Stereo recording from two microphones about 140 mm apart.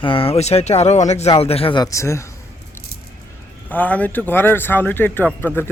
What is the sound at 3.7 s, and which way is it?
Speech, 10° left (ahead or behind).